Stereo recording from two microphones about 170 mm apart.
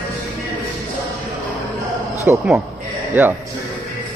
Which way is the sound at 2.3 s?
10° right (ahead or behind).